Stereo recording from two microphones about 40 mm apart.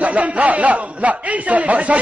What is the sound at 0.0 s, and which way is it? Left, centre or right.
A man's voice, right.